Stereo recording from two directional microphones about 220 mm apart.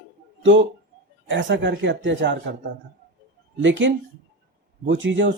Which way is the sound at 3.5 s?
55° right (ahead or behind).